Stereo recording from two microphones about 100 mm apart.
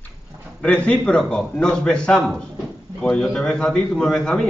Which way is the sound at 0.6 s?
10° left (ahead or behind).